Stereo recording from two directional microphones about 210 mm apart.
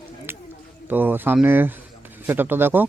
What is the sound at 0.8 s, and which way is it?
A man's voice, 10° right (ahead or behind).